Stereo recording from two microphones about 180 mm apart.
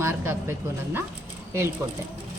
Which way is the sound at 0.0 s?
15° right (ahead or behind).